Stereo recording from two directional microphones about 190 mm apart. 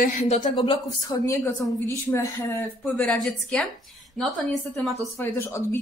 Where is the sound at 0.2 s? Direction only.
35° left (ahead or behind).